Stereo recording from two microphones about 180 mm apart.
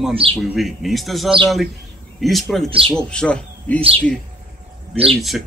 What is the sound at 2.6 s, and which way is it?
Speech, 30° right (ahead or behind).